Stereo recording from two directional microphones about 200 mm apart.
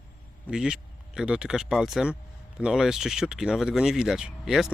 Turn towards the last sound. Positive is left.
turn(degrees=-5)  # may be behind; listen again after turning